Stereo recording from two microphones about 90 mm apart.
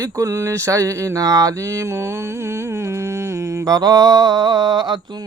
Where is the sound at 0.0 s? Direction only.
35° right (ahead or behind); by 4.9 s 55° right (ahead or behind).